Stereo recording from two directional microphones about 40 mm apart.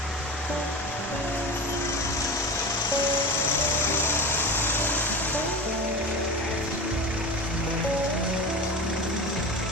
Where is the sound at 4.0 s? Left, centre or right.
Left.